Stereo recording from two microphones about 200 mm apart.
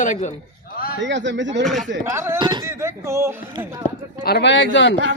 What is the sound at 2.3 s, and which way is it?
Speech, 25° right (ahead or behind).